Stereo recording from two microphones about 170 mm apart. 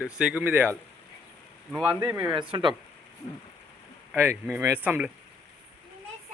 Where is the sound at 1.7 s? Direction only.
5° right (ahead or behind).